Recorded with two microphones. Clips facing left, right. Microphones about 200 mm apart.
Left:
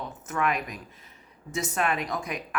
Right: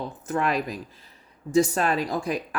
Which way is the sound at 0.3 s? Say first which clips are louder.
Right 3 dB; 30° right (ahead or behind).